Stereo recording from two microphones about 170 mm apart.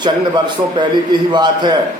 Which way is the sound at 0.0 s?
25° right (ahead or behind).